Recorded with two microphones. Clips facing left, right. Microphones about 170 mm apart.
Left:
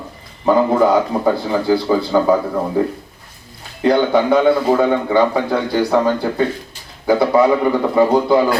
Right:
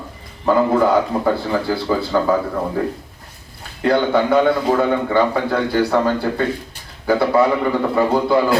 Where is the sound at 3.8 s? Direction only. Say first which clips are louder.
Left 2 dB; 15° left (ahead or behind).